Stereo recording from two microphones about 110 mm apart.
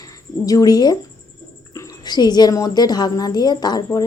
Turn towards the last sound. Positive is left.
turn(degrees=40)  # may be behind; listen again after turning